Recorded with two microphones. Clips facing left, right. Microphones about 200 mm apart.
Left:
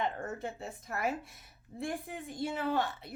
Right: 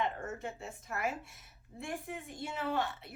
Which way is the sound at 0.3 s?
35° left (ahead or behind).